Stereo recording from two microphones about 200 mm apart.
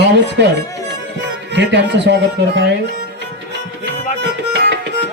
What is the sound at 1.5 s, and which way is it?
Speech, 60° right (ahead or behind).